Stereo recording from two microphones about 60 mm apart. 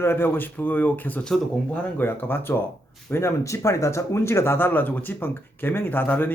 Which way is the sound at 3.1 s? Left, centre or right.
Left.